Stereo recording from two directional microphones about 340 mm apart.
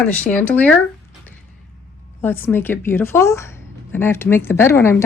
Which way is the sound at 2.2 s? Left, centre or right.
Centre.